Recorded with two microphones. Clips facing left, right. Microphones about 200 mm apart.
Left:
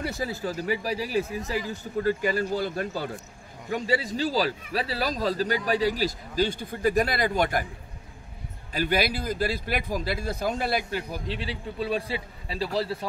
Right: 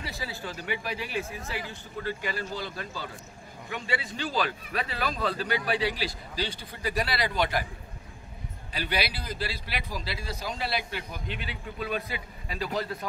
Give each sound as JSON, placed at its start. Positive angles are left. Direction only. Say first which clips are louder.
{"t": 0.0, "sound": "speech", "louder": "left 7 dB", "side_deg": 45}
{"t": 3.7, "sound": "speech", "louder": "left 7 dB", "side_deg": 40}
{"t": 8.7, "sound": "speech", "louder": "left 6 dB", "side_deg": 45}